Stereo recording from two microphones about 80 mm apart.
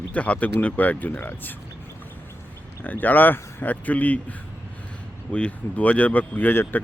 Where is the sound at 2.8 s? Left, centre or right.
Left.